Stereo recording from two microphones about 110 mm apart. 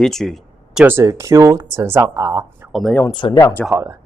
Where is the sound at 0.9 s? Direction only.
25° right (ahead or behind).